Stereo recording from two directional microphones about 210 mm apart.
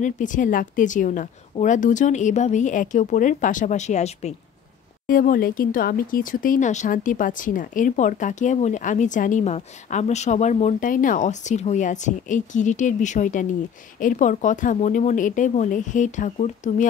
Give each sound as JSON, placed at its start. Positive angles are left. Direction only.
{"t": 0.0, "sound": "speech", "side_deg": 40}